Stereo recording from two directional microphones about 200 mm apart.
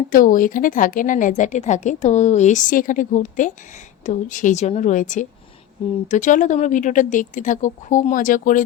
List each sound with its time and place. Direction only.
0.1 s a woman's voice: 45° left (ahead or behind)